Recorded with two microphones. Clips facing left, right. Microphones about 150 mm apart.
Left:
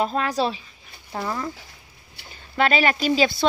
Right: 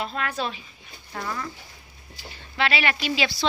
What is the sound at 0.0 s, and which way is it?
Speech, 35° left (ahead or behind).